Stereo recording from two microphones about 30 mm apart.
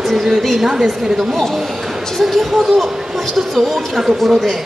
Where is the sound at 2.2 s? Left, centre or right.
Centre.